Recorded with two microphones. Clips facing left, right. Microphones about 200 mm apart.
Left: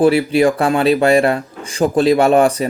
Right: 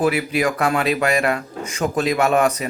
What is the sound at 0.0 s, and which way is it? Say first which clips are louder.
Speech: left 7 dB; 30° left (ahead or behind).